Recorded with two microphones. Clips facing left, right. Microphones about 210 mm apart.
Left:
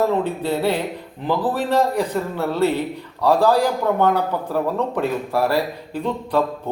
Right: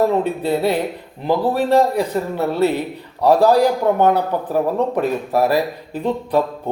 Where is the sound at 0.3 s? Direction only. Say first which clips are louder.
Right 2 dB; 10° right (ahead or behind).